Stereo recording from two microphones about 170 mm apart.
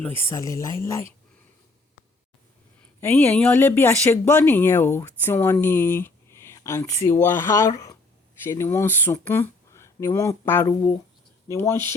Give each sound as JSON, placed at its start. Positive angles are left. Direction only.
{"t": 0.3, "sound": "speech", "side_deg": 20}
{"t": 3.0, "sound": "speech", "side_deg": 10}